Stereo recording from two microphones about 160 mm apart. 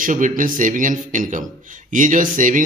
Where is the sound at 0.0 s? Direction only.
55° right (ahead or behind).